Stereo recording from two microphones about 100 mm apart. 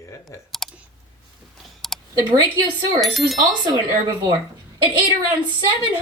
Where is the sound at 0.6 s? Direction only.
5° left (ahead or behind).